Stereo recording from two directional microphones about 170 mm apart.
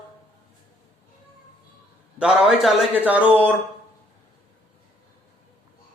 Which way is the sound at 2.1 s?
5° right (ahead or behind).